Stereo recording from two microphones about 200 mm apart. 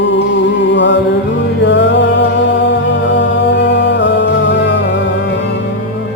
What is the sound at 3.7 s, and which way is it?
Music, 60° left (ahead or behind).